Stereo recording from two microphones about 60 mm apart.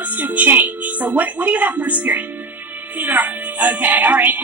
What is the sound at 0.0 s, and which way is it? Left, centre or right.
A woman's voice, right.